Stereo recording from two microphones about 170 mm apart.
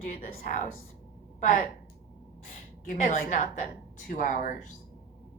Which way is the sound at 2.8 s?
50° left (ahead or behind).